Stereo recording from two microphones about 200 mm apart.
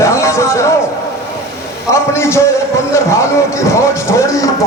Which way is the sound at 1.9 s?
15° left (ahead or behind).